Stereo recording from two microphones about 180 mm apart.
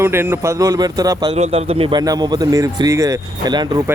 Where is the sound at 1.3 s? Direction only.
35° right (ahead or behind); by 3.6 s 20° right (ahead or behind).